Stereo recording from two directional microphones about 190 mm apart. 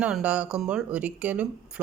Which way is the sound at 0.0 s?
5° right (ahead or behind).